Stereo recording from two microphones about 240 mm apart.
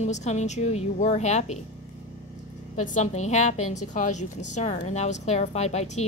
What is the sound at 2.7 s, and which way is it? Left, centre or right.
Speech, left.